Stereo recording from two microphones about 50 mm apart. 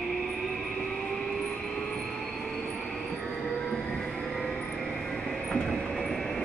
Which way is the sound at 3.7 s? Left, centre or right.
Centre.